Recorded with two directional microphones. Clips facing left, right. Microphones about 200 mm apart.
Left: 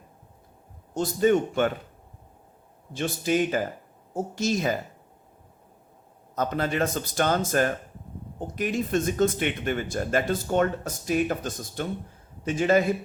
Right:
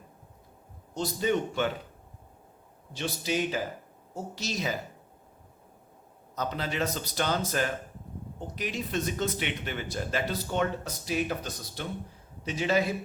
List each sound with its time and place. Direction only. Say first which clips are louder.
0.9 s speech: left 6 dB; 50° left (ahead or behind)
2.9 s speech: left 5 dB; 50° left (ahead or behind)
6.3 s speech: left 6 dB; 50° left (ahead or behind)